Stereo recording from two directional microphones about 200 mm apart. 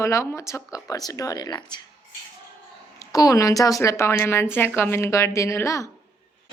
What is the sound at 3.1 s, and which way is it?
A woman's voice, 15° left (ahead or behind).